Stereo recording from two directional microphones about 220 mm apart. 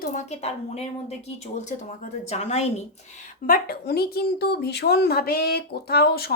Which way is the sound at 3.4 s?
40° left (ahead or behind).